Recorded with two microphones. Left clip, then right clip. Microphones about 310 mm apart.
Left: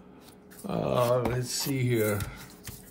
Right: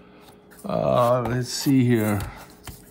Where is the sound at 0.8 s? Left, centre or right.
Left.